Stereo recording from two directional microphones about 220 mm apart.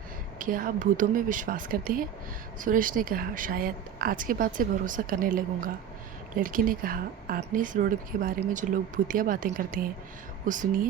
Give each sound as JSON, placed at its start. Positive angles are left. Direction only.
{"t": 0.3, "sound": "speech", "side_deg": -40}